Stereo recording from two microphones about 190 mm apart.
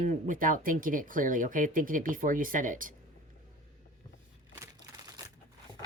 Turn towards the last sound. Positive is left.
turn(degrees=-20)  # may be behind; listen again after turning